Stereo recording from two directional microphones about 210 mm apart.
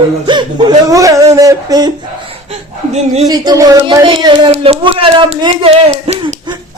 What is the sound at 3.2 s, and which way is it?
Speech, 20° right (ahead or behind).